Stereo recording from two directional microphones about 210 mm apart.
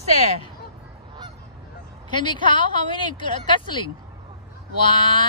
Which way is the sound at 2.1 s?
20° left (ahead or behind).